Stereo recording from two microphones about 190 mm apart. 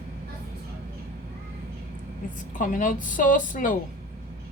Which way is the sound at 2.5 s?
45° left (ahead or behind).